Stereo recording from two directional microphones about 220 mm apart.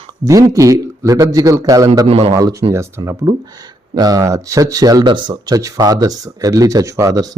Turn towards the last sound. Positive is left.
turn(degrees=-15)  # may be behind; listen again after turning